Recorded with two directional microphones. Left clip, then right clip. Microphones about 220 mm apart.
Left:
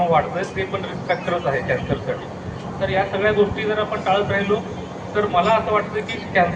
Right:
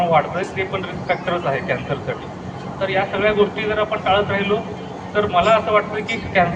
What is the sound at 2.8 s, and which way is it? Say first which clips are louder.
Speech: right 1 dB; 25° right (ahead or behind).